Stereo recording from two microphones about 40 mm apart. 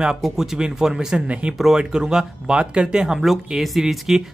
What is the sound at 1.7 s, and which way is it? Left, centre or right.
Speech, centre.